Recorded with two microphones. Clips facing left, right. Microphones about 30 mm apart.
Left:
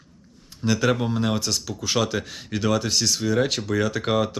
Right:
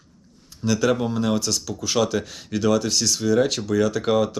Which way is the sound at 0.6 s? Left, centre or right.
Left.